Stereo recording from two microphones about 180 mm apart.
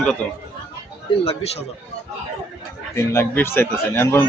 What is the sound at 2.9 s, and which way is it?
Speech, 15° left (ahead or behind).